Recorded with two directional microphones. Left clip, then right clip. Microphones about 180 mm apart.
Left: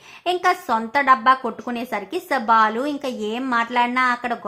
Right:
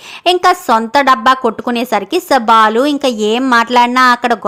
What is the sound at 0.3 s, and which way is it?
A woman's voice, 50° right (ahead or behind).